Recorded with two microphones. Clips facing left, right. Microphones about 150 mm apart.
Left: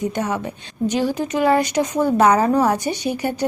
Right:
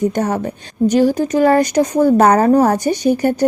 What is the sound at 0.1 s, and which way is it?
A woman's voice, 40° right (ahead or behind).